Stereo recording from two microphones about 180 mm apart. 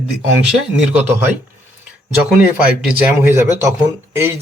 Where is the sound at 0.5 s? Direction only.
10° right (ahead or behind).